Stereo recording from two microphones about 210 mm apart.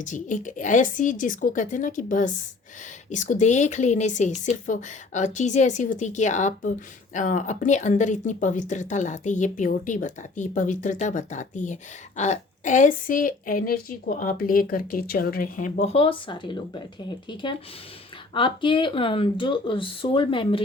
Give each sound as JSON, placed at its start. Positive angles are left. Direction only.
{"t": 0.0, "sound": "speech", "side_deg": 35}